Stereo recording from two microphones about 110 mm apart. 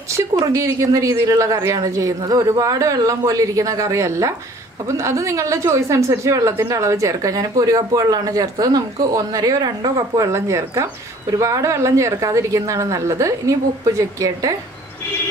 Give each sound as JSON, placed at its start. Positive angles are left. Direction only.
{"t": 0.5, "sound": "a woman's voice", "side_deg": -30}